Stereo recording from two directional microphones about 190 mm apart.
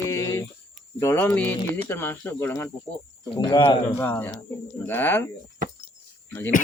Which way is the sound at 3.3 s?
20° left (ahead or behind).